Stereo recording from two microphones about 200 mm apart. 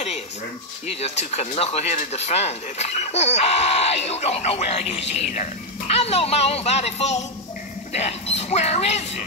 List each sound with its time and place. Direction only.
1.0 s speech: 35° left (ahead or behind)